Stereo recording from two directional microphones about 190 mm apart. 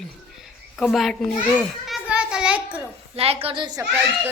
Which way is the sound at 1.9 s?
5° right (ahead or behind).